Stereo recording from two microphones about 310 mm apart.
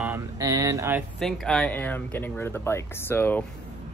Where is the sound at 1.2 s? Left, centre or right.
Centre.